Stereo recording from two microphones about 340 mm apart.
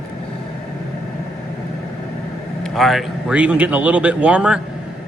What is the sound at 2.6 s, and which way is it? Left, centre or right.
A man's voice, centre.